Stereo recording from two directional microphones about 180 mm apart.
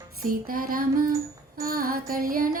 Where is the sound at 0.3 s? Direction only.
50° right (ahead or behind).